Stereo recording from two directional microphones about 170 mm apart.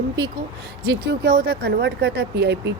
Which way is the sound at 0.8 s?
70° right (ahead or behind).